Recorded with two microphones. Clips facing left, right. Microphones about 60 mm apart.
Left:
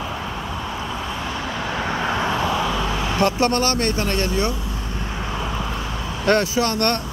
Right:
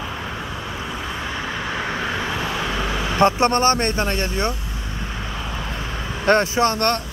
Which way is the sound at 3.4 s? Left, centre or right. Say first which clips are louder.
Right 2 dB; right.